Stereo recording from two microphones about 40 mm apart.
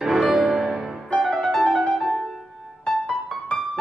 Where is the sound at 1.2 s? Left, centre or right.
Centre.